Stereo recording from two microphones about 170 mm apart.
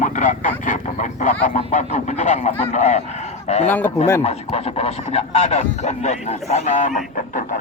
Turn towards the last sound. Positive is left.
turn(degrees=50)  # may be behind; listen again after turning